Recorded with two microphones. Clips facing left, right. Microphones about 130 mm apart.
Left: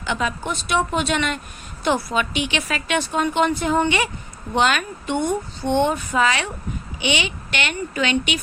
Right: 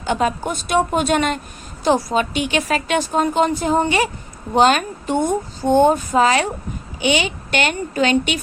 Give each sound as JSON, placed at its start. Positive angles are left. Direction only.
{"t": 0.0, "sound": "a woman's voice", "side_deg": -45}